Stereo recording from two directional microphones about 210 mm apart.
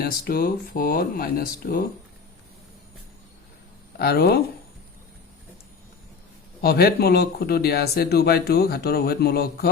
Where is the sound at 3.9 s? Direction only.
50° left (ahead or behind).